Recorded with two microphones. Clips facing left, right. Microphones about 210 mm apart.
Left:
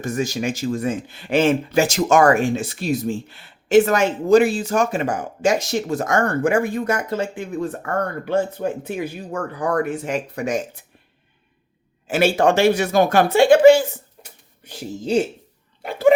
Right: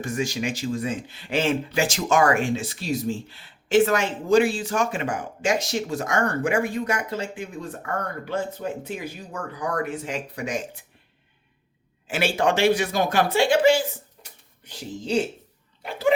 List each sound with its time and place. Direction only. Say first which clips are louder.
0.0 s speech: left 4 dB; 45° left (ahead or behind)
12.0 s speech: left 6 dB; 45° left (ahead or behind)
15.8 s speech: left 7 dB; 50° left (ahead or behind)